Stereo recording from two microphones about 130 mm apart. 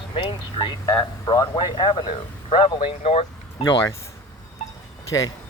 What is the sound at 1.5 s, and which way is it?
Speech, 40° left (ahead or behind).